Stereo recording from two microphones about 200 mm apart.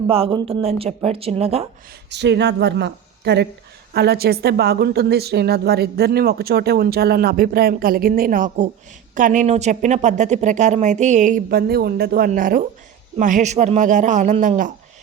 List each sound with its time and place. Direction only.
0.1 s speech: 25° right (ahead or behind)
2.0 s a woman's voice: 60° right (ahead or behind); by 14.7 s 40° right (ahead or behind)